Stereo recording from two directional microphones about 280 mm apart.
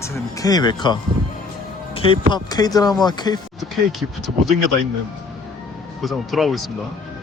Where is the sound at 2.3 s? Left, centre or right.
Centre.